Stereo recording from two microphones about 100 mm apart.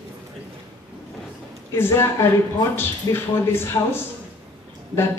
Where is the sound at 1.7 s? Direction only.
25° left (ahead or behind).